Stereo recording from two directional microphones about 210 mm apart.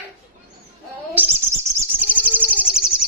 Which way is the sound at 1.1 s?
10° right (ahead or behind).